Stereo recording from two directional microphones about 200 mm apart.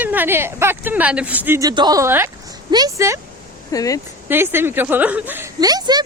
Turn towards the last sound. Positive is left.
turn(degrees=-20)  # may be behind; listen again after turning